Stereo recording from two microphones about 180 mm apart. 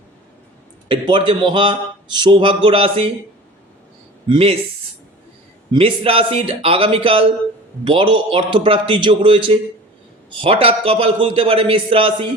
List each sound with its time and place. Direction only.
0.9 s a man's voice: 25° right (ahead or behind)
4.3 s a man's voice: 30° right (ahead or behind)
5.7 s a man's voice: 30° right (ahead or behind)